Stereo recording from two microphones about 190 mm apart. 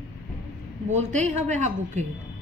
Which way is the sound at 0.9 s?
40° right (ahead or behind).